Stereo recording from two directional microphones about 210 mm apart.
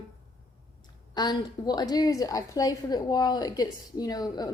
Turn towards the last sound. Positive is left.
turn(degrees=20)  # may be behind; listen again after turning